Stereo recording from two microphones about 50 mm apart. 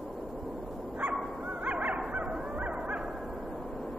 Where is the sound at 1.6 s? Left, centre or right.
Right.